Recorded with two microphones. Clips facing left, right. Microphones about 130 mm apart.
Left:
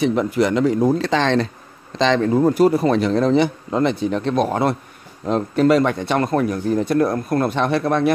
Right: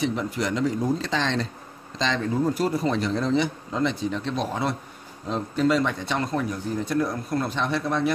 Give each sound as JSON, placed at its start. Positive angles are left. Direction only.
{"t": 0.0, "sound": "a man's voice", "side_deg": 65}